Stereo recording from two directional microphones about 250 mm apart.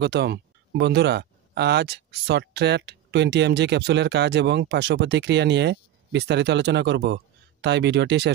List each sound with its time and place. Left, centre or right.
0.0 s speech: right